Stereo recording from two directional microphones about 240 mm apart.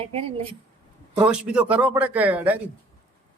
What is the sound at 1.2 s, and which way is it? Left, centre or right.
A man's voice, centre.